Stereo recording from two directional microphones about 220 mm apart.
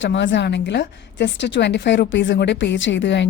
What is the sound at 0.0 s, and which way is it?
A woman's voice, 55° left (ahead or behind).